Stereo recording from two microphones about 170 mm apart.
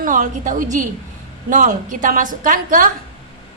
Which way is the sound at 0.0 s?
50° right (ahead or behind).